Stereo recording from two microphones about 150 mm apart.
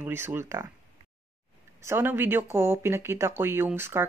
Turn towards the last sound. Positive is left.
turn(degrees=-15)  # may be behind; listen again after turning